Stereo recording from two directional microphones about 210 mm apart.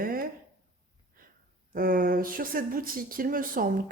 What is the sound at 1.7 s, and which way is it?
Speech, 40° right (ahead or behind).